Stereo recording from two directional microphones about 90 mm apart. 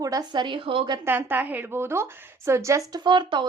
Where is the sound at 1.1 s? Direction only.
25° right (ahead or behind).